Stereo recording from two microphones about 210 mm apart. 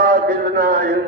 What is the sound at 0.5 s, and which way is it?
Speech, 40° right (ahead or behind).